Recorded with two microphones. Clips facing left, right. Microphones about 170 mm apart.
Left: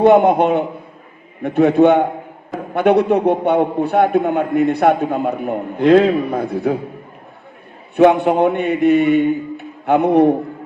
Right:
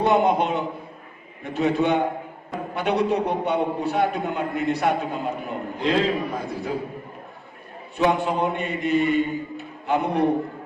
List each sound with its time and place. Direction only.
0.0 s a man's voice: 55° left (ahead or behind)
7.9 s a man's voice: 65° left (ahead or behind)